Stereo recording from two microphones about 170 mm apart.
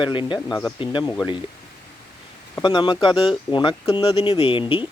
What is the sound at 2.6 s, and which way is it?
Speech, 25° left (ahead or behind).